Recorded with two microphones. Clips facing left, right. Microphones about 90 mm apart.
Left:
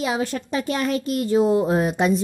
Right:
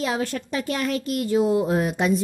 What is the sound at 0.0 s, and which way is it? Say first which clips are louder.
A woman's voice: left 1 dB; 15° left (ahead or behind).